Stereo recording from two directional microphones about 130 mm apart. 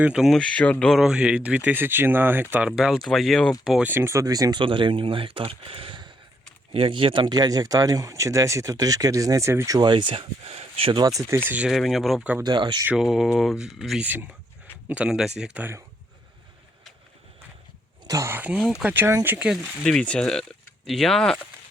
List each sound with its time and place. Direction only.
0.0 s speech: 5° right (ahead or behind)
2.6 s speech: 5° right (ahead or behind)
3.8 s speech: 20° right (ahead or behind)
4.6 s speech: 40° right (ahead or behind)
11.0 s speech: 25° right (ahead or behind); by 12.2 s centre (ahead or behind)
12.4 s speech: 35° right (ahead or behind)
12.9 s speech: centre (ahead or behind)
14.0 s speech: 15° right (ahead or behind)
18.0 s speech: 25° right (ahead or behind); by 21.3 s 5° left (ahead or behind)